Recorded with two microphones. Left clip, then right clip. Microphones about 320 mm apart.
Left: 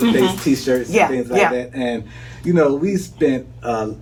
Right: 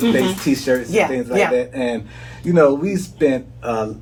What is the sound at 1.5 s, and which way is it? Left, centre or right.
Speech, centre.